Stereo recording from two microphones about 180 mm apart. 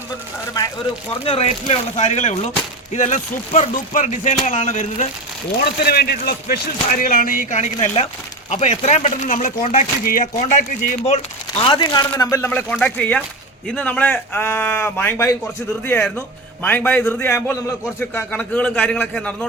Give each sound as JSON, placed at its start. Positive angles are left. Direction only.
{"t": 1.2, "sound": "speech", "side_deg": 35}
{"t": 5.5, "sound": "speech", "side_deg": 60}
{"t": 11.6, "sound": "a man's voice", "side_deg": 25}